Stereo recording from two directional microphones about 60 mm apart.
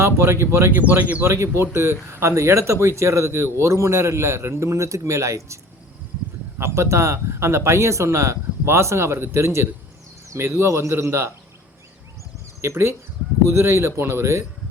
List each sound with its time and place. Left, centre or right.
0.0 s speech: right
0.7 s speech: right
1.2 s speech: right
6.7 s speech: right
12.6 s speech: right